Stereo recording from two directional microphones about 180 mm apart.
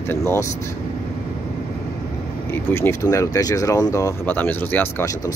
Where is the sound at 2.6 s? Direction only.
15° left (ahead or behind).